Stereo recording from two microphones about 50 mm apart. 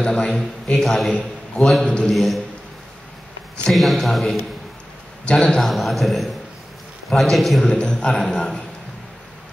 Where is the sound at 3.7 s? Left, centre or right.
Centre.